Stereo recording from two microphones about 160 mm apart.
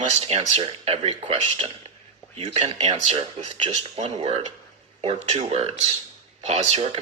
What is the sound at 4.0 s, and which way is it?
A man's voice, 40° right (ahead or behind).